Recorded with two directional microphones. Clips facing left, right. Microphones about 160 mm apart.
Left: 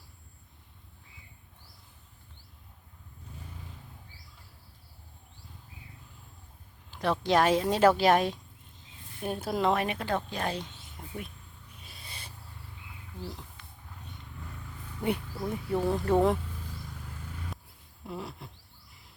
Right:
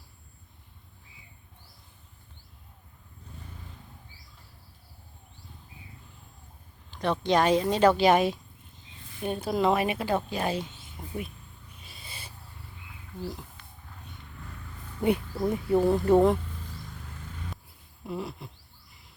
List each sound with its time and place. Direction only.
6.9 s speech: 5° left (ahead or behind)
11.8 s a sound: centre (ahead or behind)
13.6 s vehicle: 40° right (ahead or behind)
15.0 s speech: 20° right (ahead or behind)
15.4 s speech: 10° right (ahead or behind)
18.0 s a sound: centre (ahead or behind)